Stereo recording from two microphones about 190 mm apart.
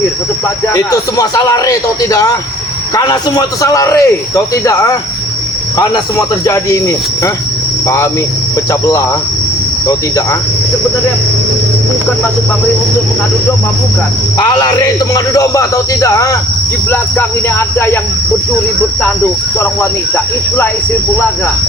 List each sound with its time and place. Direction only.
0.7 s a man's voice: 20° left (ahead or behind)
6.4 s a man's voice: 15° left (ahead or behind)
14.3 s a man's voice: 20° left (ahead or behind)
19.5 s a man's voice: 10° left (ahead or behind)